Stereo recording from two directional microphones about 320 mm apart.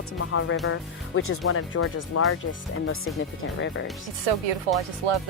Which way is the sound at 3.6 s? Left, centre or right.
Left.